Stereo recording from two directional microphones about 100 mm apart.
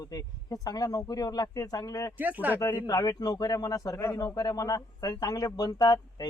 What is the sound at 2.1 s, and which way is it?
Speech, 15° right (ahead or behind).